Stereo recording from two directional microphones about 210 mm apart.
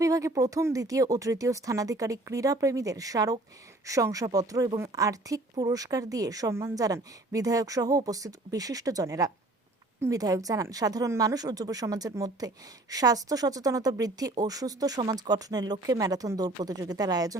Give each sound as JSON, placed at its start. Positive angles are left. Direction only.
{"t": 0.0, "sound": "a woman's voice", "side_deg": -15}